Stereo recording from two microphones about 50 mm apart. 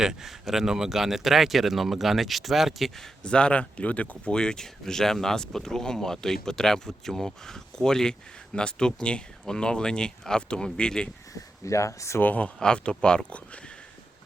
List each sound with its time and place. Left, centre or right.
0.0 s speech: centre
3.2 s speech: left
4.4 s speech: centre
11.6 s speech: left
12.2 s speech: left
12.5 s speech: centre